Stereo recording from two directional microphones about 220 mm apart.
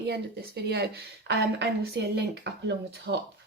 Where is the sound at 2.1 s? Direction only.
50° right (ahead or behind).